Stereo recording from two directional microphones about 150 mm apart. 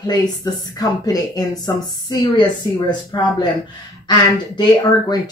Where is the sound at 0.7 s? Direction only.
25° left (ahead or behind).